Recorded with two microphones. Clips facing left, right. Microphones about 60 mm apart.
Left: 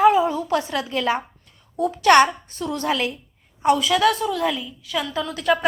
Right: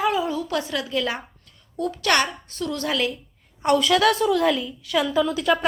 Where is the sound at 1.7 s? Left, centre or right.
Centre.